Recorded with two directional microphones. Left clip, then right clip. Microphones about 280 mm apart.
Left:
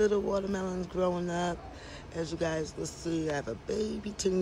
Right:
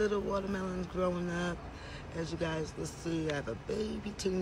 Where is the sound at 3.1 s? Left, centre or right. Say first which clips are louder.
Left 3 dB; centre.